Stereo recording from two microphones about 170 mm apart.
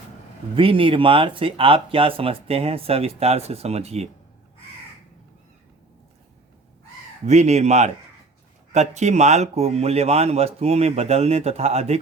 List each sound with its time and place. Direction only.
0.5 s speech: 30° right (ahead or behind)
7.3 s speech: 40° right (ahead or behind)